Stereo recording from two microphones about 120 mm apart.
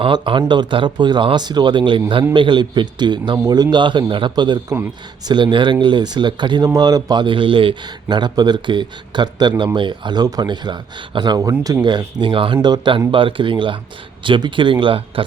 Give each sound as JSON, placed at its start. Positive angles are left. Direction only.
{"t": 0.0, "sound": "a man's voice", "side_deg": -45}